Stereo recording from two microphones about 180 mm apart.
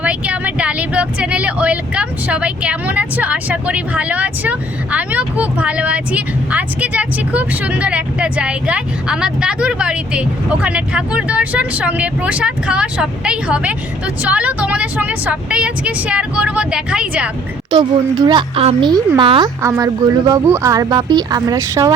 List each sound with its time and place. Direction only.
0.0 s speech: 5° right (ahead or behind)
18.3 s speech: 30° right (ahead or behind)